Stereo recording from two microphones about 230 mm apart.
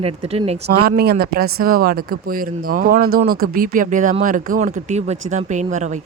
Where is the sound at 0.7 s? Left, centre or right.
Right.